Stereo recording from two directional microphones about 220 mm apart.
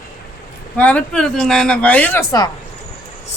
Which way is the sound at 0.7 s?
5° left (ahead or behind).